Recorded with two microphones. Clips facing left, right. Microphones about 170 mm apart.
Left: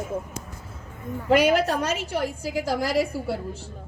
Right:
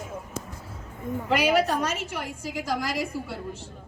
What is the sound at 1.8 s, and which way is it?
A woman's voice, 35° left (ahead or behind).